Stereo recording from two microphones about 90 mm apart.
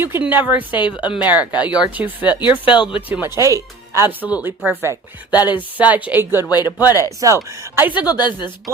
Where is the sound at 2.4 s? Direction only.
60° left (ahead or behind).